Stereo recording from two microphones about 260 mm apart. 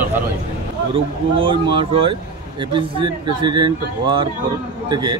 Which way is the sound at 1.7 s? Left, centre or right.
Centre.